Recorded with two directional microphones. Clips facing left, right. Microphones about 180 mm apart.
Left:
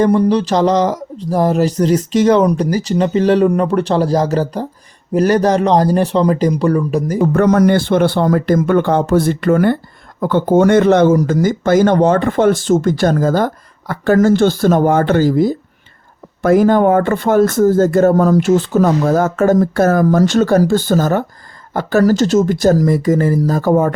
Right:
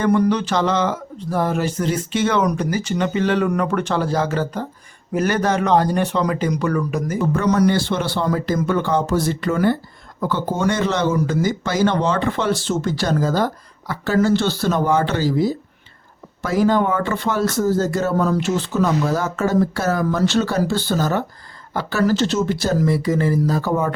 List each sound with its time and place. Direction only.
0.0 s speech: 35° left (ahead or behind)
7.2 s speech: 55° left (ahead or behind)